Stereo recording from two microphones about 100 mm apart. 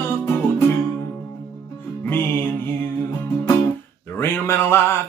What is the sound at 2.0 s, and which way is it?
Music, 20° left (ahead or behind).